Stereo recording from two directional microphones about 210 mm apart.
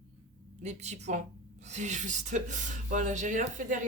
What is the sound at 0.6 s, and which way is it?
Speech, 35° right (ahead or behind).